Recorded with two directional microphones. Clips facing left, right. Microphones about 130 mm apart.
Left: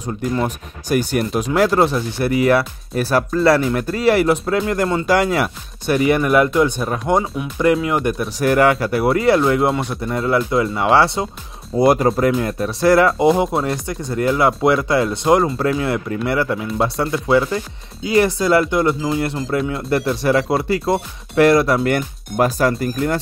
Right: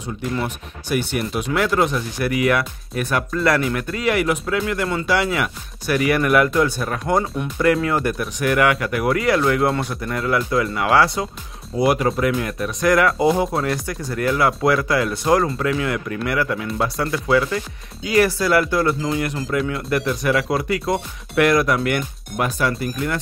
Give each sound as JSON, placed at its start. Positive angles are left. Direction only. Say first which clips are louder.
{"t": 0.0, "sound": "speech", "louder": "left 4 dB", "side_deg": 40}
{"t": 5.9, "sound": "speech", "louder": "left 3 dB", "side_deg": 25}
{"t": 8.4, "sound": "speech", "louder": "left 4 dB", "side_deg": 35}
{"t": 11.7, "sound": "speech", "louder": "left 4 dB", "side_deg": 40}